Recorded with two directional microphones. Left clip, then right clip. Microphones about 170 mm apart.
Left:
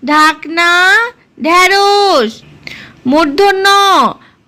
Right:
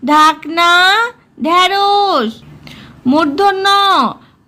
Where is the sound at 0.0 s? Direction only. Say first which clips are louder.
Even; 5° left (ahead or behind).